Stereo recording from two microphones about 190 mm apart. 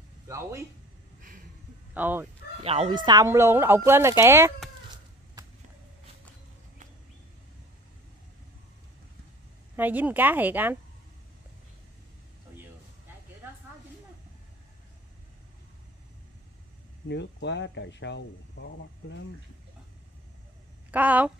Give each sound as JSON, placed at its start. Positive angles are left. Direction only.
{"t": 0.3, "sound": "speech", "side_deg": -15}
{"t": 2.0, "sound": "speech", "side_deg": -10}
{"t": 2.6, "sound": "speech", "side_deg": -30}
{"t": 9.8, "sound": "speech", "side_deg": -10}
{"t": 17.1, "sound": "speech", "side_deg": 65}
{"t": 20.9, "sound": "speech", "side_deg": -10}